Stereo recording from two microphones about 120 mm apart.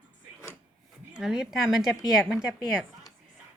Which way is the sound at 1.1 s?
5° right (ahead or behind).